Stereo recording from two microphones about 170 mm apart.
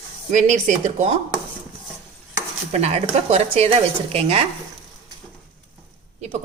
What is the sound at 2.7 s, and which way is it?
Speech, 40° right (ahead or behind).